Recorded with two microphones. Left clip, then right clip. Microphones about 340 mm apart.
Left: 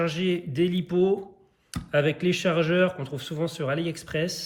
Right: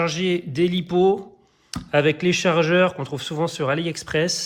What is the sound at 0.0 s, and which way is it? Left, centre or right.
Speech, centre.